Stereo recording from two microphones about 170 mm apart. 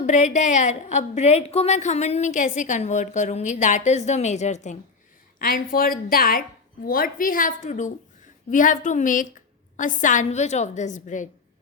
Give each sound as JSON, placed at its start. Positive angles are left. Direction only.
{"t": 0.0, "sound": "a woman's voice", "side_deg": 45}
{"t": 5.4, "sound": "a woman's voice", "side_deg": 60}